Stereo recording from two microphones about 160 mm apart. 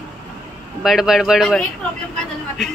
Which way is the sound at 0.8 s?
Centre (ahead or behind).